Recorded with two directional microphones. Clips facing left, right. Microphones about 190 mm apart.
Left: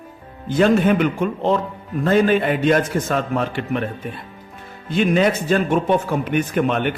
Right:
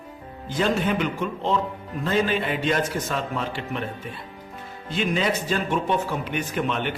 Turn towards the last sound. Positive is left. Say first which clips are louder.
# left 6 dB
turn(degrees=55)  # may be behind; listen again after turning